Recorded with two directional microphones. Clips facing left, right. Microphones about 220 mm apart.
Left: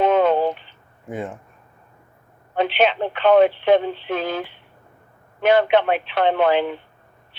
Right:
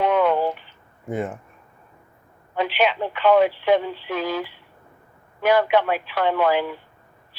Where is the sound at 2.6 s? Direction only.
25° left (ahead or behind).